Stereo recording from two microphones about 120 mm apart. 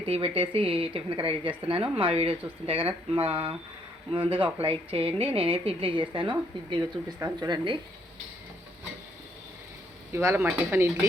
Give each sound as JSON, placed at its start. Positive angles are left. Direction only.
{"t": 0.0, "sound": "a woman's voice", "side_deg": -45}
{"t": 10.1, "sound": "speech", "side_deg": -25}